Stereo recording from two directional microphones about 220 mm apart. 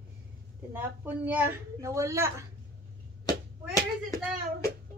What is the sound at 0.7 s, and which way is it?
A woman's voice, 10° right (ahead or behind).